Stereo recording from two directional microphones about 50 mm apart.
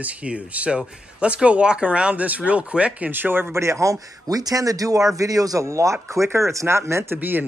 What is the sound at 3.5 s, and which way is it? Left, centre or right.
Speech, right.